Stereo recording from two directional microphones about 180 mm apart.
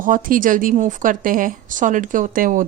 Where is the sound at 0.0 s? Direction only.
50° right (ahead or behind).